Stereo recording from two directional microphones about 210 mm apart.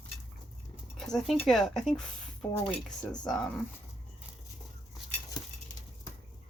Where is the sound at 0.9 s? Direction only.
Centre (ahead or behind).